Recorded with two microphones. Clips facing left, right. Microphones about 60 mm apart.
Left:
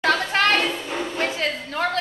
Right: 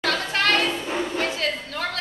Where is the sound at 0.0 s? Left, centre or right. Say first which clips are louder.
Left 4 dB; left.